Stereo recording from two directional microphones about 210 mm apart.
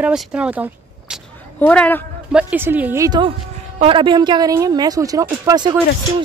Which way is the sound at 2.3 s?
5° right (ahead or behind).